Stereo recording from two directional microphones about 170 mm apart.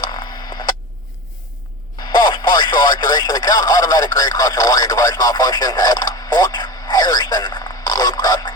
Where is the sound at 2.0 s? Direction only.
25° left (ahead or behind).